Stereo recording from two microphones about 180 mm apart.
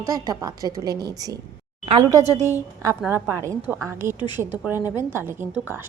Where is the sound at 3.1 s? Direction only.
15° right (ahead or behind).